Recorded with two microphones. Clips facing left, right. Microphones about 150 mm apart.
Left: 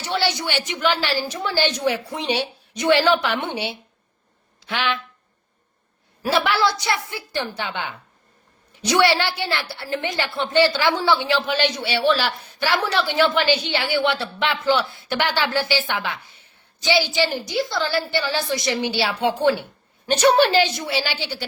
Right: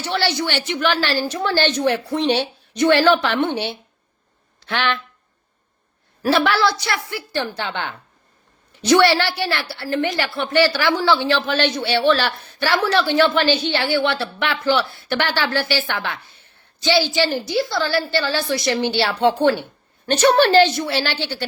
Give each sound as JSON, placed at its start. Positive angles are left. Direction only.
{"t": 0.0, "sound": "a woman's voice", "side_deg": 15}
{"t": 6.2, "sound": "a woman's voice", "side_deg": 15}